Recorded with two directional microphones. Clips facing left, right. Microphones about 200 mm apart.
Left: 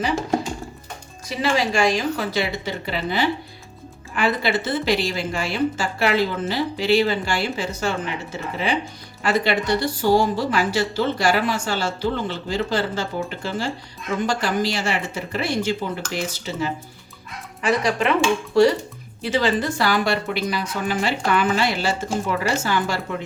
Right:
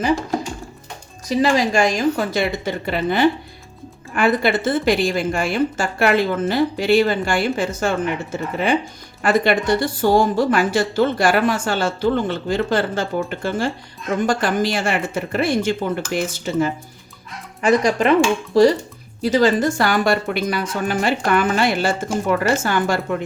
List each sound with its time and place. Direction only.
1.3 s a woman's voice: 40° right (ahead or behind)